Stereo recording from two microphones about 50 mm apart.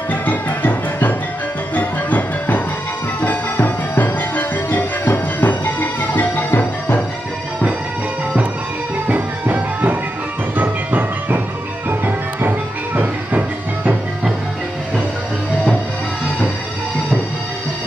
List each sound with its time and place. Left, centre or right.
0.1 s music: left
9.0 s music: right